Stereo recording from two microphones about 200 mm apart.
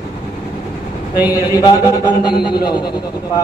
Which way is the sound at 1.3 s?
15° left (ahead or behind).